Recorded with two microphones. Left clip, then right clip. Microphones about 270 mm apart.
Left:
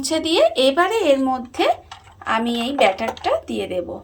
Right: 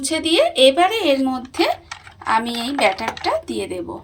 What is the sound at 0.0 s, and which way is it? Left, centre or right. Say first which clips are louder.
Speech: even; centre.